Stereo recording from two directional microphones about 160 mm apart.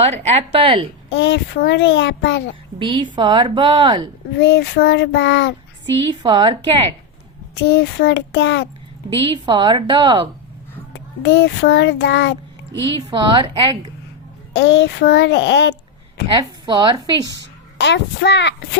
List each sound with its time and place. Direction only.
0.0 s speech: 40° right (ahead or behind)
1.1 s a child's voice: 90° left
2.7 s a woman's voice: 30° right (ahead or behind)
4.4 s a child's voice: 90° left
6.2 s speech: 30° right (ahead or behind)
7.7 s a child's voice: 90° left
9.0 s a woman's voice: 35° right (ahead or behind)
10.9 s a child's voice: 90° left
12.9 s a woman's voice: 30° right (ahead or behind)
14.5 s a child's voice: 90° left
16.3 s a woman's voice: 30° right (ahead or behind)
17.7 s a child's voice: 90° left